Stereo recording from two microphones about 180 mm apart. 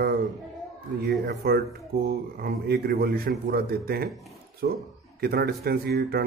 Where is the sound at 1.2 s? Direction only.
60° right (ahead or behind).